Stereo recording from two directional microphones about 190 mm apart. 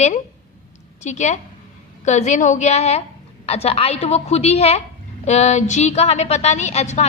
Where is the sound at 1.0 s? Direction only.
40° left (ahead or behind).